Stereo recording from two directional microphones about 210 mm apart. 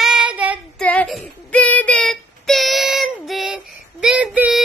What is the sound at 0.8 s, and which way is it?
Child singing, 5° left (ahead or behind).